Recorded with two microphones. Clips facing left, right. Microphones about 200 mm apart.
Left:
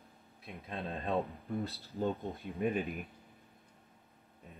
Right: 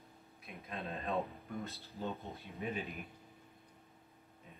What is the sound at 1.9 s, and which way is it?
Speech, 50° left (ahead or behind).